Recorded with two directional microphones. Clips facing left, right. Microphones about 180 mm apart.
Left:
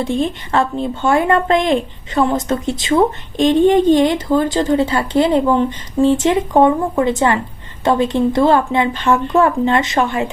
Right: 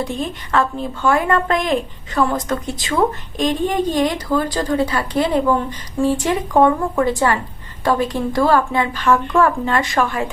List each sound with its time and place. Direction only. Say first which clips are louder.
0.0 s speech: left 5 dB; 25° left (ahead or behind)